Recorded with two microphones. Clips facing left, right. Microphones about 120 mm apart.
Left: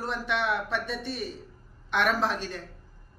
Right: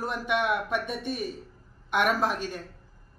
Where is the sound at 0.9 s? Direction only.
50° right (ahead or behind).